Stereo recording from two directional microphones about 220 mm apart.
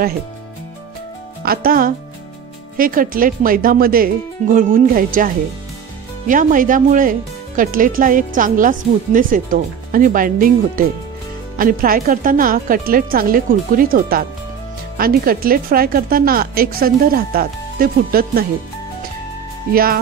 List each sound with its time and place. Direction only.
1.4 s speech: 40° right (ahead or behind)
19.7 s speech: 40° right (ahead or behind)